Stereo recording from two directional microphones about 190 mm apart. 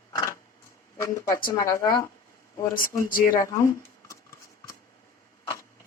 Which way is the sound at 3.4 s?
15° left (ahead or behind).